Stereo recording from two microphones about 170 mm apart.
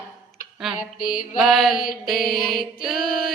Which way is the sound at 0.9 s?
55° left (ahead or behind).